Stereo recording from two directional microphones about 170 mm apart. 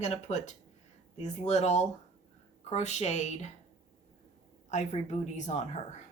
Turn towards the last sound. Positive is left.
turn(degrees=45)  # may be behind; listen again after turning